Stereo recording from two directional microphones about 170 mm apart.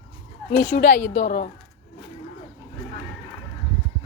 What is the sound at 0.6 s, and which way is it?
Speech, 45° left (ahead or behind).